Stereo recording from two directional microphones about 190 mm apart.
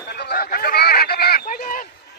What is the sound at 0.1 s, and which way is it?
Honk, 55° left (ahead or behind).